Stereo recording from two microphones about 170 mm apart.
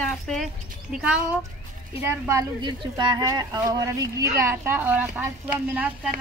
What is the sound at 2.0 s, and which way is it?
Speech, 15° right (ahead or behind).